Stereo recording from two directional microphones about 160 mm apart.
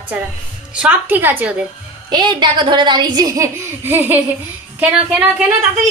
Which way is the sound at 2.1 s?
30° right (ahead or behind).